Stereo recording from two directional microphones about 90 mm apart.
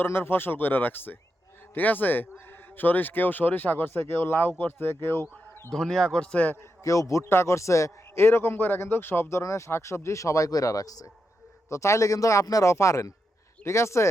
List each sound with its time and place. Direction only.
0.0 s speech: 25° left (ahead or behind)
5.7 s a man's voice: 5° left (ahead or behind)
6.6 s speech: 35° left (ahead or behind)
9.4 s speech: 35° left (ahead or behind)